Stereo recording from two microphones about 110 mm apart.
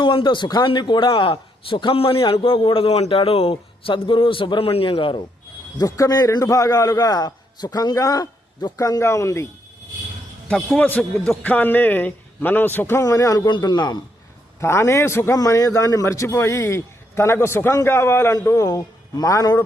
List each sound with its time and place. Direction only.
0.0 s a man's voice: 50° left (ahead or behind)
5.7 s a man's voice: 35° left (ahead or behind)
10.8 s a man's voice: 15° left (ahead or behind)
13.5 s a man's voice: 40° left (ahead or behind)
14.6 s a man's voice: 25° left (ahead or behind)